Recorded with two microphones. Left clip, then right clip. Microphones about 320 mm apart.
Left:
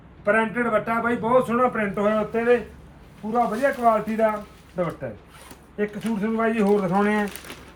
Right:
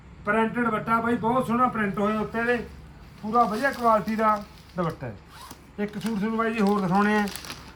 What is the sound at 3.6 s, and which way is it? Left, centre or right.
Speech, centre.